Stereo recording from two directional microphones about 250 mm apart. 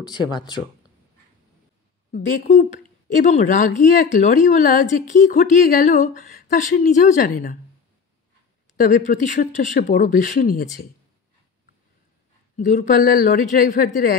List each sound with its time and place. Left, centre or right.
0.0 s speech: centre
2.1 s a woman's voice: left
8.7 s a woman's voice: left
12.5 s a woman's voice: left